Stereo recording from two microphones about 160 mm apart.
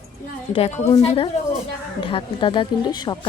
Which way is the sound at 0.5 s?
45° left (ahead or behind).